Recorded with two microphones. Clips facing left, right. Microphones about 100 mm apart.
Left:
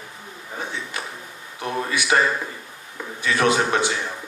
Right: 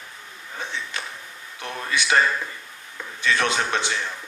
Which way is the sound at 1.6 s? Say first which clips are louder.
Left 3 dB; 25° left (ahead or behind).